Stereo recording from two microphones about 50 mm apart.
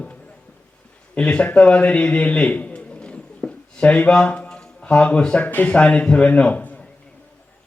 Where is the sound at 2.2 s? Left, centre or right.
Left.